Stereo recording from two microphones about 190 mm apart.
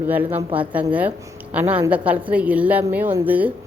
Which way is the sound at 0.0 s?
10° right (ahead or behind).